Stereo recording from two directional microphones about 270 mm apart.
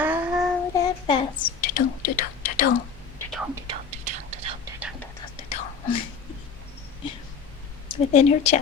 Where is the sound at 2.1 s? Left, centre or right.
Left.